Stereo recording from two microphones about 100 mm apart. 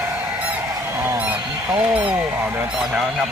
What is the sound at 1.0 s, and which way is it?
Honk, 20° right (ahead or behind).